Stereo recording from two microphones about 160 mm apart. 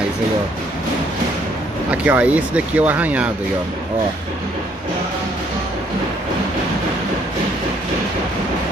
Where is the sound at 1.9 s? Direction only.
10° right (ahead or behind).